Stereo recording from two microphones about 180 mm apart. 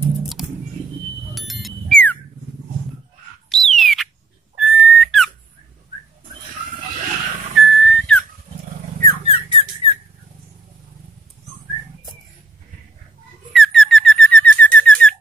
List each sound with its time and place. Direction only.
0.4 s music: centre (ahead or behind)
1.3 s a sound: centre (ahead or behind)
3.4 s a sound: centre (ahead or behind)
4.6 s whistle: centre (ahead or behind)
7.5 s whistle: centre (ahead or behind)
9.3 s squawk: 30° left (ahead or behind)
13.5 s bird: centre (ahead or behind)